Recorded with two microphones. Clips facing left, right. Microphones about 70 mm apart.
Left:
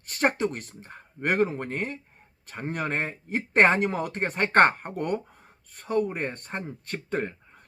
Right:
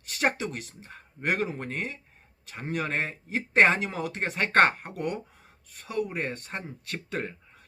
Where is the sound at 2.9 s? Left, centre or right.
Left.